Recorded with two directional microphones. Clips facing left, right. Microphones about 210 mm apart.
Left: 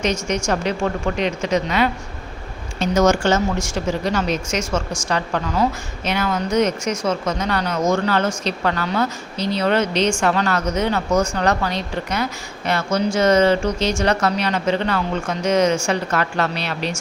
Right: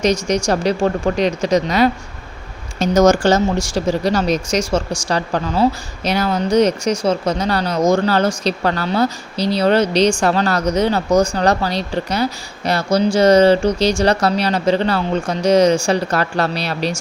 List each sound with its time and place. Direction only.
0.0 s speech: 35° right (ahead or behind)